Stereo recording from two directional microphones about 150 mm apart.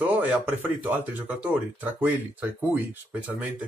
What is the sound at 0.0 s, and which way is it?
A man's voice, 10° right (ahead or behind).